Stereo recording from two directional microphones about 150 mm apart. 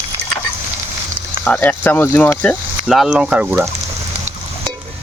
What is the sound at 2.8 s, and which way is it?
Speech, 5° right (ahead or behind).